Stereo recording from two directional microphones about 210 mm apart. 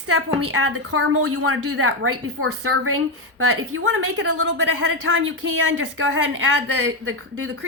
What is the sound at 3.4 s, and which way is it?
A woman's voice, 80° right.